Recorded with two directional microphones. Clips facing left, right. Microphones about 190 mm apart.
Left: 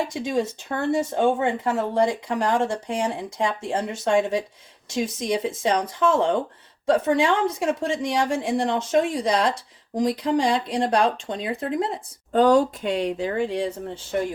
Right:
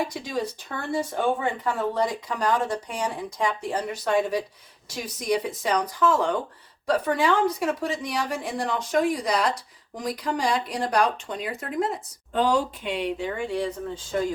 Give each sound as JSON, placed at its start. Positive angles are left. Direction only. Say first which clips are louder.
{"t": 0.0, "sound": "a woman's voice", "louder": "left 4 dB", "side_deg": 25}
{"t": 12.3, "sound": "speech", "louder": "left 6 dB", "side_deg": 45}